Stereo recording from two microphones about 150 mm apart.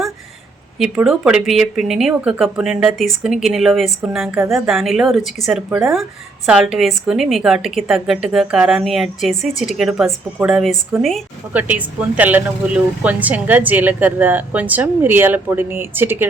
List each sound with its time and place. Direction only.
0.8 s a woman's voice: 5° right (ahead or behind)